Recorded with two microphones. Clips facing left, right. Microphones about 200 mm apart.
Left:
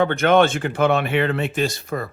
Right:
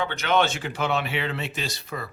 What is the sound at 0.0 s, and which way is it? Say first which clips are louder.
Speech: left 8 dB; 55° left (ahead or behind).